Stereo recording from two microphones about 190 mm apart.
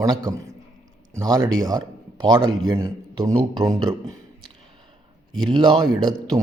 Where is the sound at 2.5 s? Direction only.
90° right.